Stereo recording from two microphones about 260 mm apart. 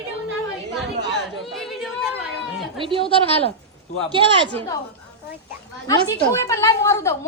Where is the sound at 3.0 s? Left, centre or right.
Left.